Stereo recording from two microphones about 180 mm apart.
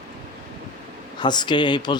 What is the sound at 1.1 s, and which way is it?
Speech, 25° left (ahead or behind).